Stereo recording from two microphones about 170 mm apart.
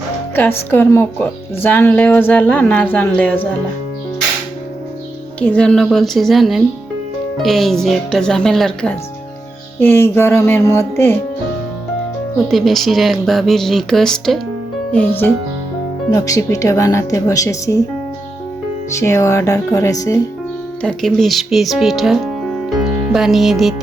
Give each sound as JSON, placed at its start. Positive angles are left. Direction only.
{"t": 0.3, "sound": "speech", "side_deg": 10}
{"t": 5.4, "sound": "speech", "side_deg": 5}
{"t": 9.8, "sound": "speech", "side_deg": 15}
{"t": 12.5, "sound": "speech", "side_deg": 0}
{"t": 16.1, "sound": "speech", "side_deg": 20}
{"t": 18.9, "sound": "speech", "side_deg": 15}
{"t": 20.8, "sound": "speech", "side_deg": 0}